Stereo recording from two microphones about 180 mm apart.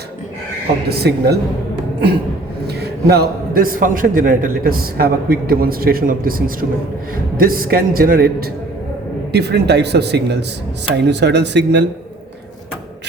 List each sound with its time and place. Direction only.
0.9 s a man's voice: 65° right (ahead or behind)
2.6 s a man's voice: 65° right (ahead or behind)
9.3 s speech: 65° right (ahead or behind)